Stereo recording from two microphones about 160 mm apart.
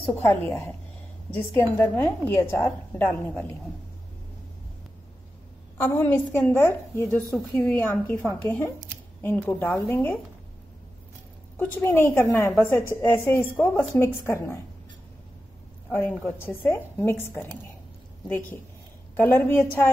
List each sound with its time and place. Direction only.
0.1 s a woman's voice: 15° left (ahead or behind)
5.8 s a woman's voice: 10° left (ahead or behind)
11.5 s a woman's voice: 10° left (ahead or behind)
15.9 s a woman's voice: 10° left (ahead or behind)
19.1 s a woman's voice: 15° left (ahead or behind)